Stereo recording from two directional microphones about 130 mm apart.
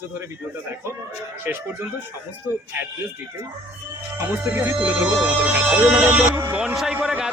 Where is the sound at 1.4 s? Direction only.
15° right (ahead or behind).